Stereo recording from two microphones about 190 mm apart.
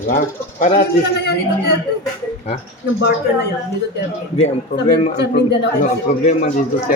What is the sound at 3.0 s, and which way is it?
Speech, 60° left (ahead or behind).